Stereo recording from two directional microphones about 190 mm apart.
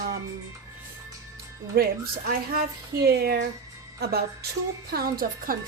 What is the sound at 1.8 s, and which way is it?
A woman's voice, 55° right (ahead or behind).